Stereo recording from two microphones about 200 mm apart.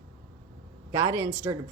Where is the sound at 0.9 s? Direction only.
15° right (ahead or behind).